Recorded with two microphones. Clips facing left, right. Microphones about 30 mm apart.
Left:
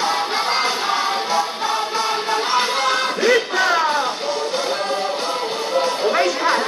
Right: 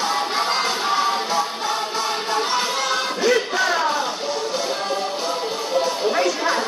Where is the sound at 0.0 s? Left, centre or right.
Centre.